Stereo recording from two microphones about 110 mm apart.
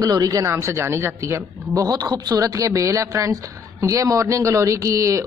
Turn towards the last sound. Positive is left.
turn(degrees=-30)  # may be behind; listen again after turning